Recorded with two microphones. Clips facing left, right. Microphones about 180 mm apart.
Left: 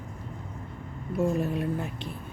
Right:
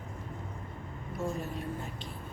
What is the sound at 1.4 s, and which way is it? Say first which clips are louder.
Speech: left 9 dB; 65° left (ahead or behind).